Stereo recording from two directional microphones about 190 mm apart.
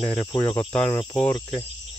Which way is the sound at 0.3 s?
15° left (ahead or behind).